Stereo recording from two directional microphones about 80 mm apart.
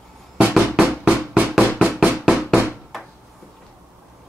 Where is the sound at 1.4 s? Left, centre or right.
Centre.